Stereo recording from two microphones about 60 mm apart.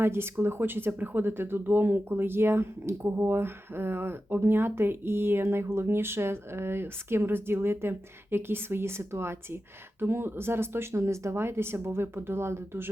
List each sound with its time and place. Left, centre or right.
0.0 s speech: right